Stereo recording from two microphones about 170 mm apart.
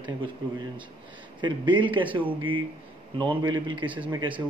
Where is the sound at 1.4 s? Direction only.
30° right (ahead or behind).